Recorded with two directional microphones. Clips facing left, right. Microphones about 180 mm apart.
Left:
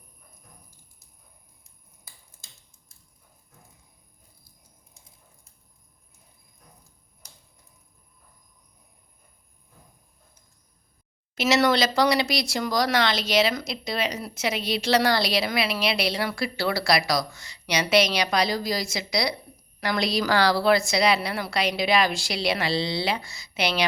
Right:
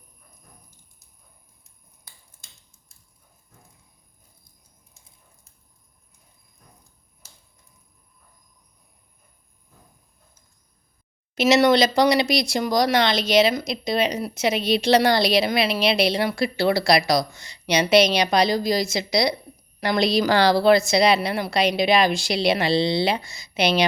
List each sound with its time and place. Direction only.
11.3 s speech: 20° right (ahead or behind)